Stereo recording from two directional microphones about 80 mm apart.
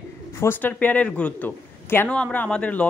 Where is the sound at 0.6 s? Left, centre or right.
Left.